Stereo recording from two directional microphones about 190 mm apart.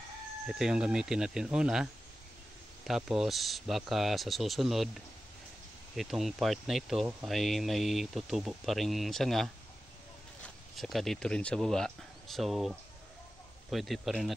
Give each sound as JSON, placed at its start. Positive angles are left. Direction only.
{"t": 0.5, "sound": "speech", "side_deg": -5}